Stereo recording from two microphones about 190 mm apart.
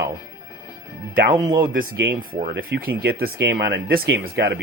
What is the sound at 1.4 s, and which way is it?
Speech, 20° right (ahead or behind).